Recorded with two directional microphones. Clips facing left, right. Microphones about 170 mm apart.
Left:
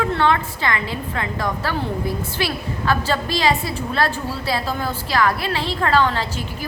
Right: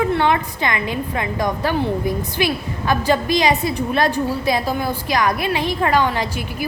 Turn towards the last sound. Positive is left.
turn(degrees=-10)  # may be behind; listen again after turning